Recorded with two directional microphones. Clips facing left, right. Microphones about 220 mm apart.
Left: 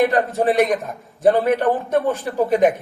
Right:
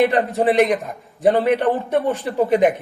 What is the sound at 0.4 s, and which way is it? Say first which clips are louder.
Speech: right 2 dB; 15° right (ahead or behind).